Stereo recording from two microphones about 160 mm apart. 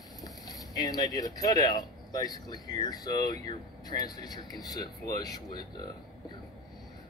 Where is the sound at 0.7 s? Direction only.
25° left (ahead or behind).